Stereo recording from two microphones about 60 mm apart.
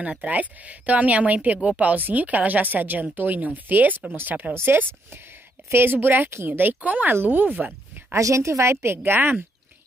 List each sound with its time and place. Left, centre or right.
0.3 s a woman's voice: right
4.6 s speech: right
8.1 s a woman's voice: right